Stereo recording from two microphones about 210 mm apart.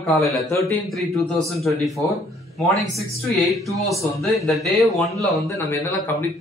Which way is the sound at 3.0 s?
Centre (ahead or behind).